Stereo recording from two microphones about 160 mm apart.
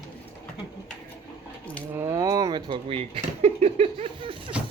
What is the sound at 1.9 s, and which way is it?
Speech, 20° right (ahead or behind).